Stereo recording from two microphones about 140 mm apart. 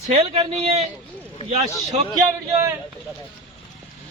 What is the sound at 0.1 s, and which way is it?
Speech, 45° right (ahead or behind).